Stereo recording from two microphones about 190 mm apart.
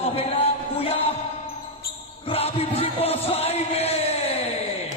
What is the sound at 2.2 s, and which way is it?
A man's voice, 30° left (ahead or behind).